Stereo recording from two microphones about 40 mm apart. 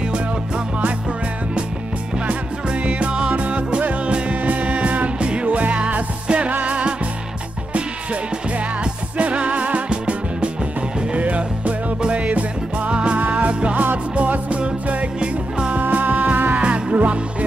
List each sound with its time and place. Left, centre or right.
2.2 s music: right
15.1 s music: right
15.8 s music: right
16.5 s music: right